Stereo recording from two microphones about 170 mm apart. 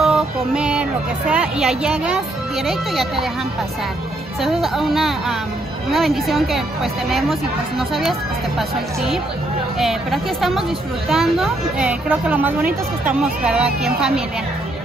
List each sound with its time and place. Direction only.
0.0 s a sound: 5° right (ahead or behind)
1.3 s speech: 5° right (ahead or behind)
4.4 s a woman's voice: centre (ahead or behind)